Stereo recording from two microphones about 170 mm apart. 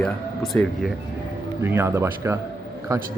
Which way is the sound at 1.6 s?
15° right (ahead or behind).